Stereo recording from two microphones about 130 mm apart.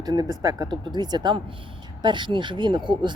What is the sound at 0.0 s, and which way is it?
Speech, 30° right (ahead or behind).